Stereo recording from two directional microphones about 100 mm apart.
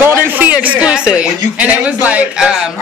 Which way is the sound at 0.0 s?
20° right (ahead or behind).